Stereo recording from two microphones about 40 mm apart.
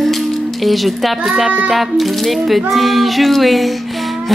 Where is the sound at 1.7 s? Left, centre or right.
Centre.